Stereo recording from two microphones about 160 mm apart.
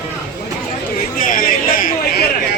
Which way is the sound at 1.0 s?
60° left (ahead or behind).